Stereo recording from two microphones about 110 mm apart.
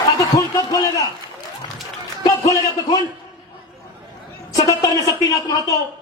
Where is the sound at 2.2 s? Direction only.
35° left (ahead or behind).